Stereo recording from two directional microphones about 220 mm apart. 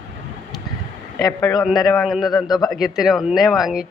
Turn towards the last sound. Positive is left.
turn(degrees=0)  # may be behind; listen again after turning